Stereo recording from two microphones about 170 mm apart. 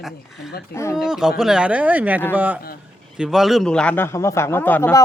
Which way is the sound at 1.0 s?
Centre (ahead or behind).